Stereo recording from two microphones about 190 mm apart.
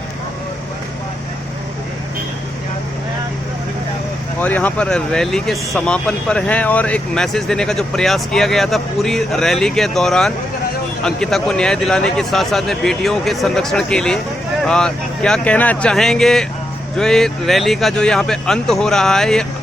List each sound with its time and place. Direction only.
4.4 s speech: 10° left (ahead or behind)